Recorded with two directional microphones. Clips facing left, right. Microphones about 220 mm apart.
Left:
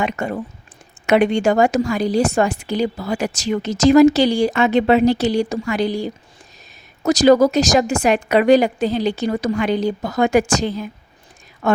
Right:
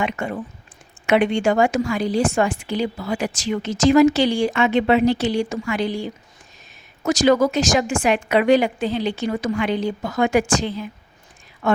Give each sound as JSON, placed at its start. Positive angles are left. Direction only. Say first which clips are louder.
{"t": 0.0, "sound": "a woman's voice", "louder": "left 2 dB", "side_deg": 40}